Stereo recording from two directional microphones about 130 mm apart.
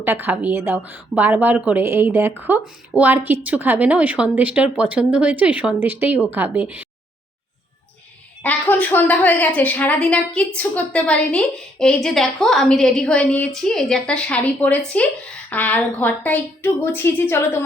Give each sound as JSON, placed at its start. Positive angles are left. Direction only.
{"t": 0.0, "sound": "a woman's voice", "side_deg": -15}
{"t": 8.4, "sound": "a woman's voice", "side_deg": 10}